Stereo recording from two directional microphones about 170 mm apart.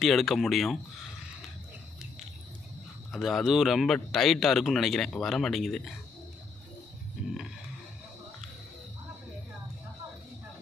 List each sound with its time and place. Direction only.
0.0 s speech: centre (ahead or behind)
3.1 s speech: centre (ahead or behind)